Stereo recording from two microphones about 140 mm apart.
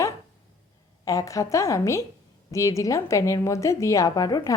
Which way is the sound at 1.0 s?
25° left (ahead or behind).